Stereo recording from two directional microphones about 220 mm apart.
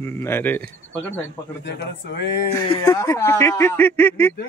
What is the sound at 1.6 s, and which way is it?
Speech, 50° left (ahead or behind).